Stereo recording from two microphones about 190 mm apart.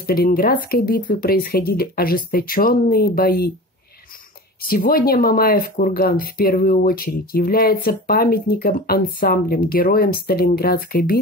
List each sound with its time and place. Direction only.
0.0 s speech: 50° left (ahead or behind)
4.6 s speech: 50° left (ahead or behind)